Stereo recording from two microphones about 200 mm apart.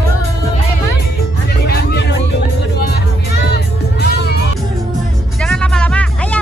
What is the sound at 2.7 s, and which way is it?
Music, 50° left (ahead or behind).